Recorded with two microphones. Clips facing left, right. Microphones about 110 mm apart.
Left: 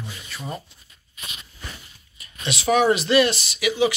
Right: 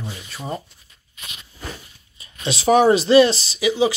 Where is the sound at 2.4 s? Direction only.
35° right (ahead or behind).